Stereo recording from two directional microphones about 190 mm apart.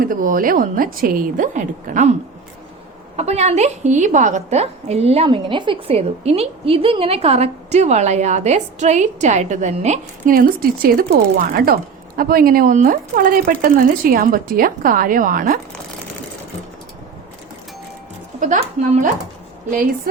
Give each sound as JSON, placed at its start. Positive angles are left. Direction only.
{"t": 0.0, "sound": "a woman's voice", "side_deg": -45}
{"t": 3.2, "sound": "a woman's voice", "side_deg": -35}
{"t": 18.3, "sound": "a woman's voice", "side_deg": -40}